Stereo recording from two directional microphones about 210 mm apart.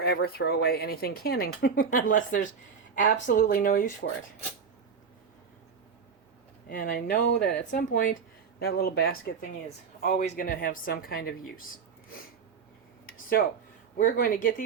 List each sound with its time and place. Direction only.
0.0 s speech: 50° left (ahead or behind)
6.7 s speech: 45° left (ahead or behind)
13.4 s speech: 50° left (ahead or behind)